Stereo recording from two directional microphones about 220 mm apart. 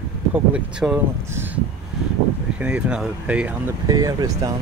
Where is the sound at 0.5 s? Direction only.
5° right (ahead or behind).